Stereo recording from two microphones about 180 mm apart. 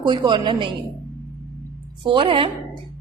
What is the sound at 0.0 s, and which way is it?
Speech, 25° right (ahead or behind).